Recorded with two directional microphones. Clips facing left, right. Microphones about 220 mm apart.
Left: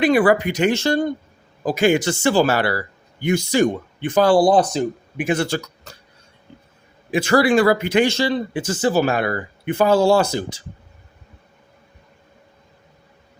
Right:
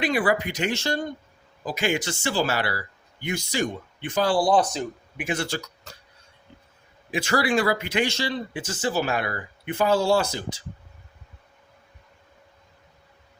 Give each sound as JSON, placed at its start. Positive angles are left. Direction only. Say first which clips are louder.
{"t": 0.0, "sound": "speech", "louder": "left 8 dB", "side_deg": 50}
{"t": 5.3, "sound": "speech", "louder": "left 7 dB", "side_deg": 55}
{"t": 7.1, "sound": "speech", "louder": "left 7 dB", "side_deg": 55}